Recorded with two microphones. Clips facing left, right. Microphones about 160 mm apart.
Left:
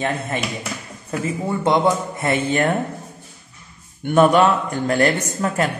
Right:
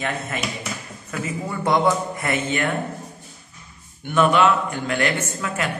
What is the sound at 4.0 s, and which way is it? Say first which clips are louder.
Speech: left 4 dB; 45° left (ahead or behind).